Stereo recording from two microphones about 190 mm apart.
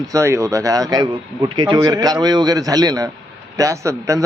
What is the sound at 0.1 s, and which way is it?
A man's voice, 15° right (ahead or behind).